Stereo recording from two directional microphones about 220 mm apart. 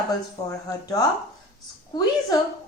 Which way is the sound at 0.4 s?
15° left (ahead or behind).